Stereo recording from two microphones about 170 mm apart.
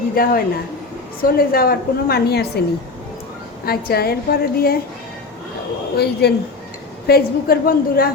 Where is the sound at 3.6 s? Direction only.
65° left (ahead or behind).